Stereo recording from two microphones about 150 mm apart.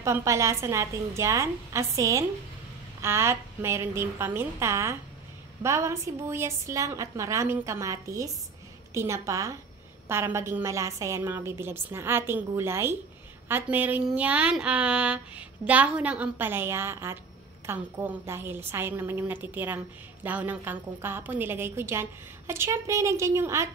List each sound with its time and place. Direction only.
0.0 s a woman's voice: 20° right (ahead or behind)